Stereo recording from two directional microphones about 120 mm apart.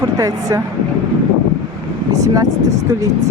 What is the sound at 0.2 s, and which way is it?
Speech, 30° right (ahead or behind).